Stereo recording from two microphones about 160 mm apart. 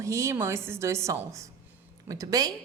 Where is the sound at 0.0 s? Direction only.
20° right (ahead or behind).